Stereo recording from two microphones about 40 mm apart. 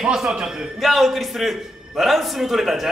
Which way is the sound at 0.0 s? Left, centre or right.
Centre.